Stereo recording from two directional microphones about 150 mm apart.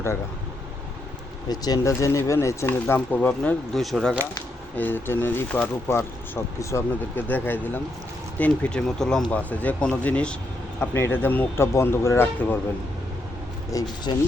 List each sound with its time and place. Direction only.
1.5 s speech: 25° left (ahead or behind); by 4.2 s centre (ahead or behind)
4.8 s speech: 15° left (ahead or behind)
13.7 s speech: 25° left (ahead or behind)